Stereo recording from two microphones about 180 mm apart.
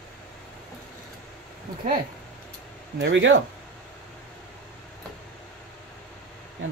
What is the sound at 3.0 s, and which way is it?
Speech, 90° right.